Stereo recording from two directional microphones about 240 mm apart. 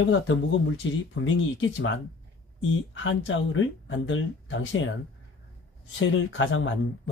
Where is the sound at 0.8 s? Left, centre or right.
Left.